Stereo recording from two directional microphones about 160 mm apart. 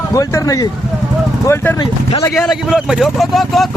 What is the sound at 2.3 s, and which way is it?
Speech, centre (ahead or behind).